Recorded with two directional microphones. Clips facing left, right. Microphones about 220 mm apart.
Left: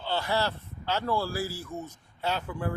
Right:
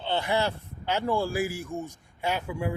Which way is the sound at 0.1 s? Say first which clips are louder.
Right 2 dB; 20° right (ahead or behind).